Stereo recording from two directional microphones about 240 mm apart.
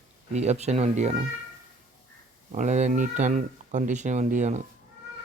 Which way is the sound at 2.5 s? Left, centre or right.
Right.